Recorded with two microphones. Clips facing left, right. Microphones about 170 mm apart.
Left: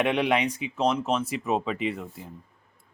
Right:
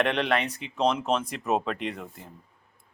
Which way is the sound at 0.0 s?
10° left (ahead or behind).